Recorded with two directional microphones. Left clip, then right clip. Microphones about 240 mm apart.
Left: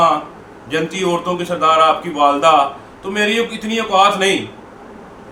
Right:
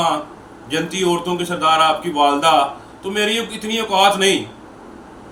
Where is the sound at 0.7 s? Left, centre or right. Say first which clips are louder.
Left 1 dB; centre.